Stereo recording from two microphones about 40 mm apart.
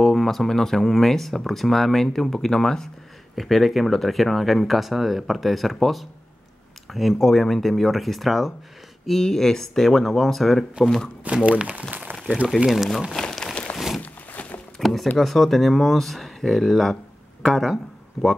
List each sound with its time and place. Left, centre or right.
0.0 s a sound: centre
0.5 s speech: centre
3.3 s speech: centre
6.9 s speech: centre
7.2 s speech: centre
11.4 s speech: right
11.9 s a sound: right
12.6 s speech: centre
13.3 s a sound: centre
13.7 s a sound: centre
14.8 s speech: centre
18.2 s speech: centre